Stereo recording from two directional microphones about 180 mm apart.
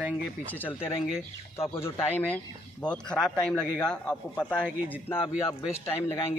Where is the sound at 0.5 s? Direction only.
10° left (ahead or behind).